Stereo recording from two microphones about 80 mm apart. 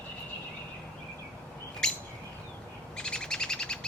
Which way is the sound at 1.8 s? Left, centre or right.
Centre.